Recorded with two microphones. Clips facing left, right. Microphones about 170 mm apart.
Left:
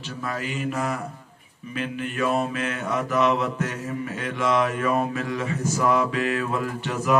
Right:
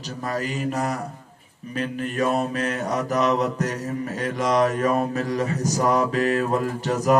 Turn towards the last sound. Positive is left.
turn(degrees=-40)  # may be behind; listen again after turning